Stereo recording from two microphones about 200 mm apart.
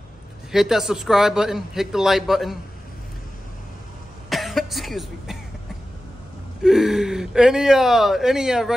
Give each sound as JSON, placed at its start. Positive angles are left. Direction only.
{"t": 0.5, "sound": "a man's voice", "side_deg": 0}
{"t": 4.3, "sound": "cough", "side_deg": 0}
{"t": 6.6, "sound": "a man's voice", "side_deg": 0}